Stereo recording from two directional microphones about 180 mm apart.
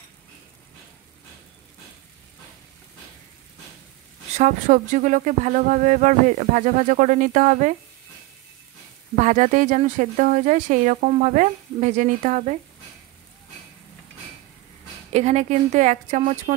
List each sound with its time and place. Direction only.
4.3 s speech: 40° right (ahead or behind)
9.2 s speech: 40° right (ahead or behind)
15.1 s speech: 40° right (ahead or behind)